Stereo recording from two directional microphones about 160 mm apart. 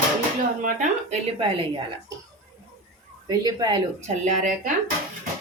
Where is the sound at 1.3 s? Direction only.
35° right (ahead or behind).